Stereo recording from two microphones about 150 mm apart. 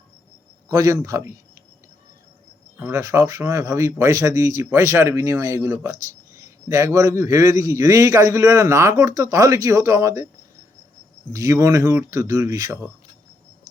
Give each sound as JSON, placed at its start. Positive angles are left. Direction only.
{"t": 0.7, "sound": "speech", "side_deg": -20}
{"t": 2.7, "sound": "speech", "side_deg": -20}
{"t": 11.3, "sound": "speech", "side_deg": -20}